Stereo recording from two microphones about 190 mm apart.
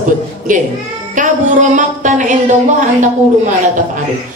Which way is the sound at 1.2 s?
40° right (ahead or behind).